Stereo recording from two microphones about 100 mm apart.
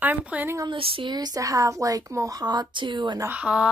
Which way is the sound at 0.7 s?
65° right (ahead or behind).